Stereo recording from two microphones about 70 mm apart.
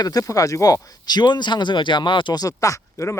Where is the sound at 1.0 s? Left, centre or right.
Left.